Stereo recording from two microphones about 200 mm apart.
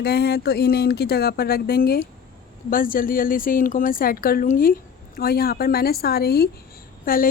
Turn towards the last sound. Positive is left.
turn(degrees=45)  # may be behind; listen again after turning